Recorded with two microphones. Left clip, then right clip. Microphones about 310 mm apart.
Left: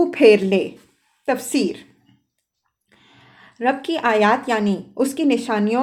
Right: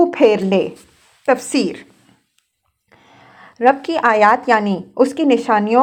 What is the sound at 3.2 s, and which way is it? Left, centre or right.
A woman's voice, centre.